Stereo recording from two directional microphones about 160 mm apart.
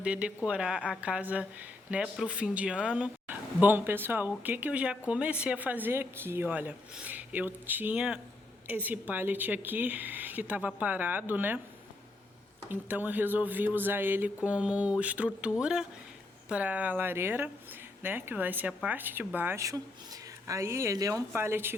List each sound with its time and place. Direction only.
0.0 s speech: 5° right (ahead or behind)
12.6 s speech: 10° right (ahead or behind)